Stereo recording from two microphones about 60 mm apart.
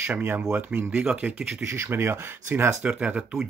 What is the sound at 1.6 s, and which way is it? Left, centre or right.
Speech, right.